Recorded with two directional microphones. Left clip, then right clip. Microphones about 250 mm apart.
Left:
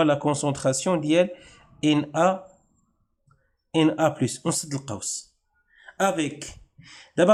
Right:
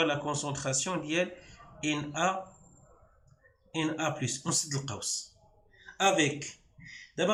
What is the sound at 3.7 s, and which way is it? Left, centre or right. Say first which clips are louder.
Speech: left 11 dB; left.